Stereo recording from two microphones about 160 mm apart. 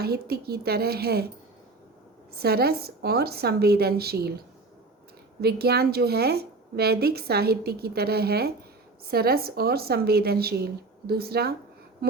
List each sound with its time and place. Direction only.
0.0 s a woman's voice: 80° right
2.3 s a woman's voice: 80° right
5.4 s a woman's voice: 80° right